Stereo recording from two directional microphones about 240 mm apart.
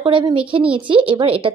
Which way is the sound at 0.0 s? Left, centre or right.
Right.